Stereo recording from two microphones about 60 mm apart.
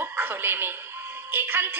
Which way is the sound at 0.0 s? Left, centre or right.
Right.